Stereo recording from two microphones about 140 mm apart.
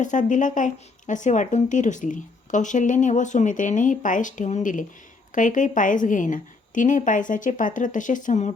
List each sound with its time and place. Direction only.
0.0 s a woman's voice: 65° left (ahead or behind)